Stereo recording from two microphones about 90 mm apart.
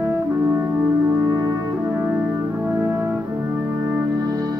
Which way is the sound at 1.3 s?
35° right (ahead or behind).